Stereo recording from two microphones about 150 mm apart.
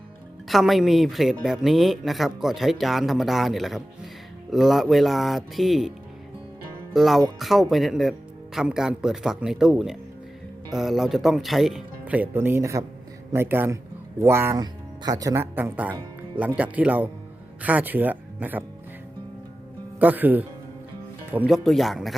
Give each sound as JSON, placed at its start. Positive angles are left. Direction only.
{"t": 0.4, "sound": "speech", "side_deg": 0}
{"t": 6.9, "sound": "speech", "side_deg": 0}
{"t": 20.0, "sound": "speech", "side_deg": -10}
{"t": 21.5, "sound": "speech", "side_deg": 0}